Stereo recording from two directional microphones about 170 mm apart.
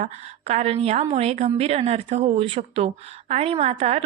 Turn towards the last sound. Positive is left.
turn(degrees=-35)  # may be behind; listen again after turning